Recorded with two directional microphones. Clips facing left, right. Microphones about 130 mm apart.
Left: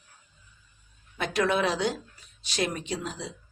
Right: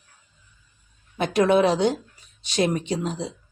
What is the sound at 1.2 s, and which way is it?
Speech, 20° right (ahead or behind).